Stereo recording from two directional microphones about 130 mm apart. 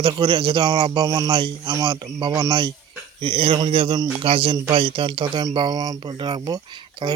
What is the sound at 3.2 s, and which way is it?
Speech, 45° right (ahead or behind).